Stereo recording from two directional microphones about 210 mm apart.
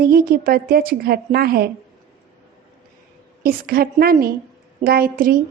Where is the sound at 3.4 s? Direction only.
45° right (ahead or behind).